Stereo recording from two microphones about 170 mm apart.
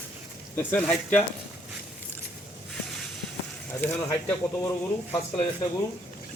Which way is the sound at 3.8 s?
15° left (ahead or behind).